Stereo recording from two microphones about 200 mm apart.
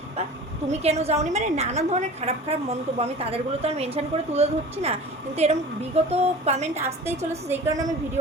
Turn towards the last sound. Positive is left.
turn(degrees=-15)  # may be behind; listen again after turning